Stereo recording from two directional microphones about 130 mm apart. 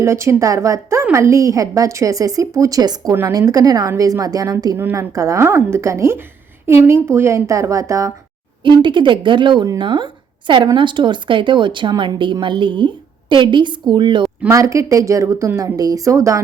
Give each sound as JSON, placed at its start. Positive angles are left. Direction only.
{"t": 0.0, "sound": "speech", "side_deg": -20}
{"t": 8.8, "sound": "speech", "side_deg": -40}
{"t": 14.5, "sound": "speech", "side_deg": -25}